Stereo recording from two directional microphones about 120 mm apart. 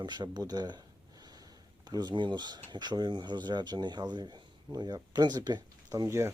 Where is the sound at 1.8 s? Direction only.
35° right (ahead or behind).